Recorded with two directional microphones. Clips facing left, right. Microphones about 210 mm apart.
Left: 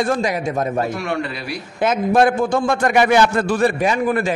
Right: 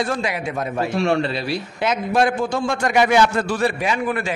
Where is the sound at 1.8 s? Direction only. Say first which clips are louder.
Left 4 dB; 50° left (ahead or behind).